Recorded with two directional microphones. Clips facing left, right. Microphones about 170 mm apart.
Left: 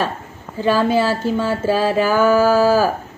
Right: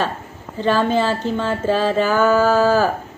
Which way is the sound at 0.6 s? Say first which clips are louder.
Left 1 dB; 10° left (ahead or behind).